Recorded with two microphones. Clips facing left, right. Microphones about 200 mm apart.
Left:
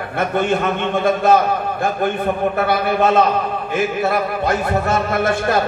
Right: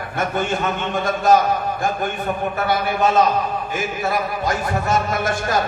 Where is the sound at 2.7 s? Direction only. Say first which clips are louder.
Left 1 dB; 60° left (ahead or behind).